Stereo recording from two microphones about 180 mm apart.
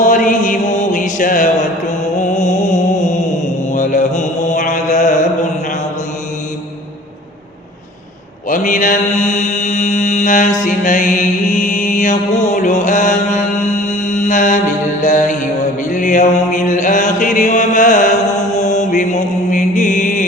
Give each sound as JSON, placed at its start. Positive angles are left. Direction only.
{"t": 0.0, "sound": "mantra", "side_deg": 45}
{"t": 2.1, "sound": "music", "side_deg": 40}
{"t": 3.7, "sound": "mantra", "side_deg": 45}
{"t": 8.4, "sound": "mantra", "side_deg": 45}